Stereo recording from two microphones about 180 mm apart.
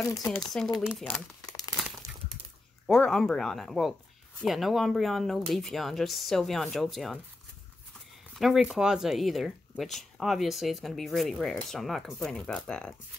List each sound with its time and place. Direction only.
0.4 s speech: centre (ahead or behind)
2.9 s speech: centre (ahead or behind)
8.4 s speech: centre (ahead or behind)